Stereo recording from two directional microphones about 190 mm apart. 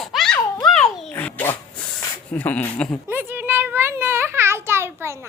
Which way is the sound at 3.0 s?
10° right (ahead or behind).